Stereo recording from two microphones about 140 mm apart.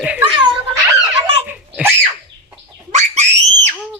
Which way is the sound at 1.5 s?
10° right (ahead or behind).